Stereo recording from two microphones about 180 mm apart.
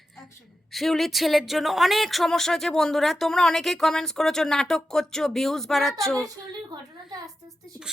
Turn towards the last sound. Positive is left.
turn(degrees=-20)  # may be behind; listen again after turning